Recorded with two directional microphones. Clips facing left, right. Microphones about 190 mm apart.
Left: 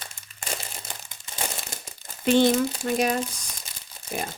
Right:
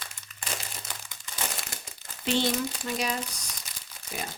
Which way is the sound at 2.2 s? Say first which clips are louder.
Left 8 dB; 50° left (ahead or behind).